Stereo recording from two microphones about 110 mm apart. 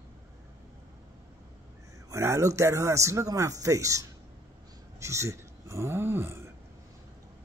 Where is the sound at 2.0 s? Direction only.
25° right (ahead or behind).